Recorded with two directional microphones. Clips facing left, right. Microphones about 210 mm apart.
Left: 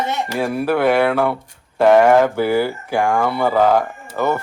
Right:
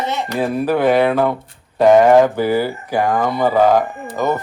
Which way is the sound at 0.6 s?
15° right (ahead or behind).